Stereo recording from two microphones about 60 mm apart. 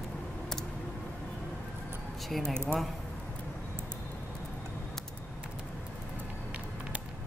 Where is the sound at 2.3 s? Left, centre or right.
Centre.